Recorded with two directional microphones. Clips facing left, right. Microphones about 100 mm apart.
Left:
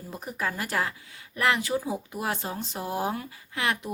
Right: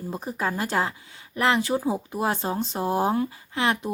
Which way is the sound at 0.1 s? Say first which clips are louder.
Right 3 dB; 25° right (ahead or behind).